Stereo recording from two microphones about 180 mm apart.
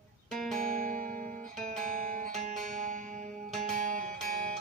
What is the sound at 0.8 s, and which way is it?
Music, 50° right (ahead or behind).